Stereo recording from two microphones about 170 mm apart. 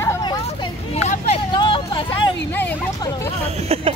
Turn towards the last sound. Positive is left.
turn(degrees=-35)  # may be behind; listen again after turning